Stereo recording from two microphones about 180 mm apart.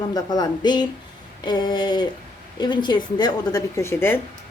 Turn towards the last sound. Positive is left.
turn(degrees=10)  # may be behind; listen again after turning